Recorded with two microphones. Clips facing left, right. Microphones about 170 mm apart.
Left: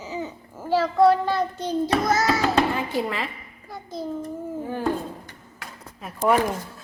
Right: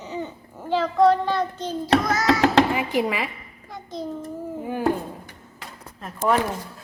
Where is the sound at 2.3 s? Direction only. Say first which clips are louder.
Right 8 dB; 80° right.